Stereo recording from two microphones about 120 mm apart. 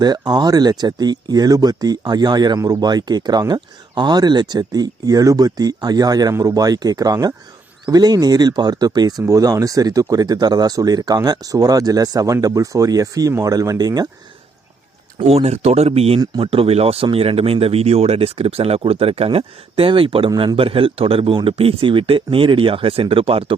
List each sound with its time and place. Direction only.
0.0 s speech: 35° right (ahead or behind)
15.2 s speech: 60° right (ahead or behind)
20.3 s speech: 35° right (ahead or behind)
20.6 s speech: 50° right (ahead or behind)